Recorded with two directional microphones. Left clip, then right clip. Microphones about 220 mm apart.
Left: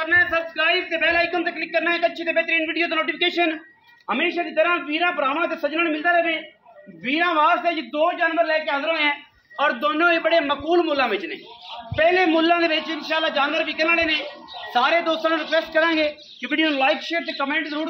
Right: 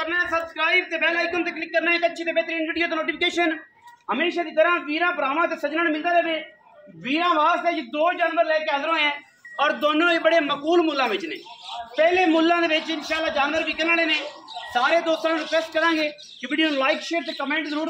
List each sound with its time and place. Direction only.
0.0 s a man's voice: 15° left (ahead or behind)